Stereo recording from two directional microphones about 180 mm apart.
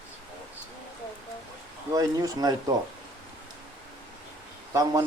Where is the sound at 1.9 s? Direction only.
20° right (ahead or behind).